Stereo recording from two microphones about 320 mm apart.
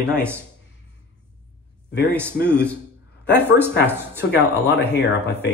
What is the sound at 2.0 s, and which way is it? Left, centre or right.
Speech, centre.